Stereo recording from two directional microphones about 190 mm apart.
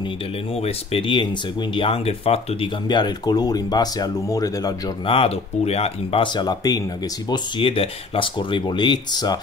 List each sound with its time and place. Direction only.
0.6 s speech: 30° left (ahead or behind)